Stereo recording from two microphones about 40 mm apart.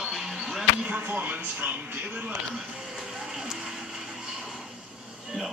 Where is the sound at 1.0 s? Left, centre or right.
Right.